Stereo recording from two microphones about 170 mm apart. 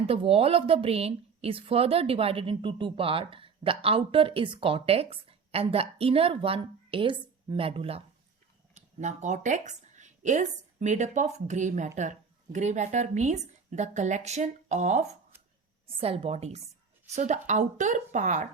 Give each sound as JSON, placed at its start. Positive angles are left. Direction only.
{"t": 0.0, "sound": "a woman's voice", "side_deg": -35}
{"t": 8.7, "sound": "a woman's voice", "side_deg": -45}